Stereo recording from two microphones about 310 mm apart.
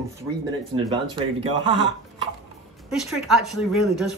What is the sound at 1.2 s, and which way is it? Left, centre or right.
Speech, centre.